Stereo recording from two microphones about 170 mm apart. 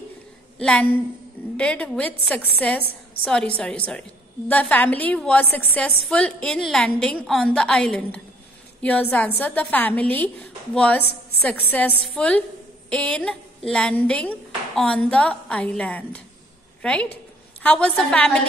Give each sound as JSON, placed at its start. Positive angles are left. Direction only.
{"t": 0.6, "sound": "a woman's voice", "side_deg": 5}